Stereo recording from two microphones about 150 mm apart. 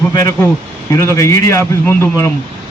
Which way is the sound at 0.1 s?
20° left (ahead or behind).